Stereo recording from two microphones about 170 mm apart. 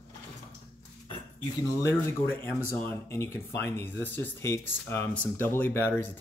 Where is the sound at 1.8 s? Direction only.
15° left (ahead or behind).